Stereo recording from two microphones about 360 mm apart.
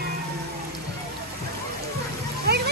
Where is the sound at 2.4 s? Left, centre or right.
Right.